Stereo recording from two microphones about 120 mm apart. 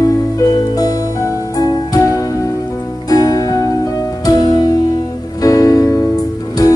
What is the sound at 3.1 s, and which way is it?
Music, 30° left (ahead or behind).